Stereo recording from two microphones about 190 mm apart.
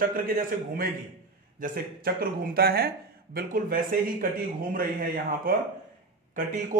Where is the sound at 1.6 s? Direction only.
50° right (ahead or behind).